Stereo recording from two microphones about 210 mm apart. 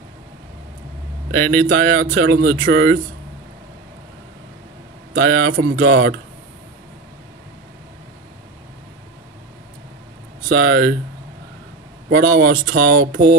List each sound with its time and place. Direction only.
1.4 s speech: 10° left (ahead or behind)
1.7 s speech: 50° right (ahead or behind)
5.1 s speech: 50° right (ahead or behind)
10.5 s speech: 50° right (ahead or behind)
12.1 s speech: 50° right (ahead or behind)